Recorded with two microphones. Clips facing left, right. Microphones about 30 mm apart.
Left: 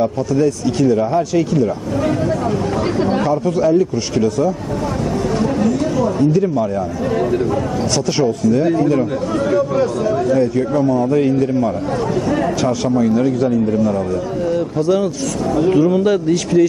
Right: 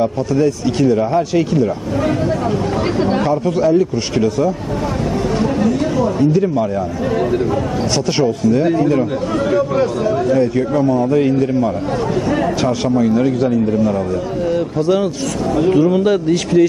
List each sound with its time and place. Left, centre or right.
0.0 s speech: centre
5.4 s a sound: centre
8.2 s speech: centre
15.7 s speech: centre